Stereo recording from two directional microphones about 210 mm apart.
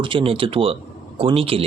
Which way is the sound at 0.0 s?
25° right (ahead or behind).